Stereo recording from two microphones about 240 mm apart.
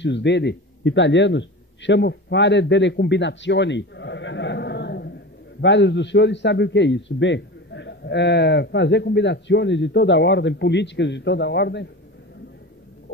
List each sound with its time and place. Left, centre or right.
0.0 s a man's voice: left